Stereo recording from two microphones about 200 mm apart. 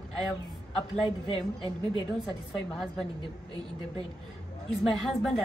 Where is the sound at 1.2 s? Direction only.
25° left (ahead or behind).